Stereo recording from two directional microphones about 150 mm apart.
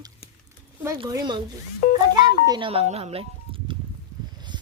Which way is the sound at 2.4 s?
25° right (ahead or behind).